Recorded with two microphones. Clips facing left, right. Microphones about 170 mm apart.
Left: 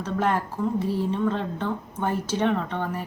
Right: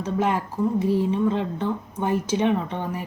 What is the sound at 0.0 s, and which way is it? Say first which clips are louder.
A woman's voice: right 1 dB; 15° right (ahead or behind).